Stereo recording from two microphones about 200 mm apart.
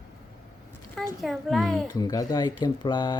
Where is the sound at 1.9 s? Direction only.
20° left (ahead or behind).